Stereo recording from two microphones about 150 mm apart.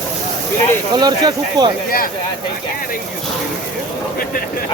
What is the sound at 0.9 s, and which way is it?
Speech, 25° right (ahead or behind).